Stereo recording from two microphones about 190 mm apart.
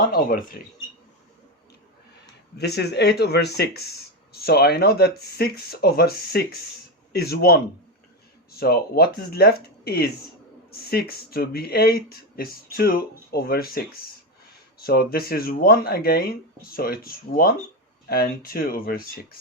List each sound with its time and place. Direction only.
0.1 s speech: 50° left (ahead or behind)
2.6 s speech: 60° left (ahead or behind)